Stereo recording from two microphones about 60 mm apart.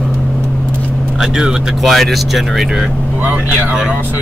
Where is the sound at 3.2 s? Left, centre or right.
Right.